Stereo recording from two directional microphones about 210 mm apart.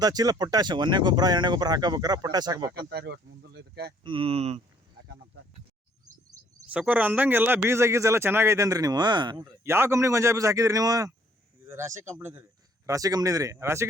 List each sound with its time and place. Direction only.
0.0 s speech: 15° right (ahead or behind)
2.7 s speech: 50° right (ahead or behind)
4.0 s speech: 25° right (ahead or behind)
6.7 s a man's voice: 5° right (ahead or behind)